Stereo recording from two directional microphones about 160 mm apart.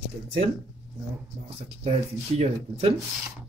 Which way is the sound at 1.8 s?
40° right (ahead or behind).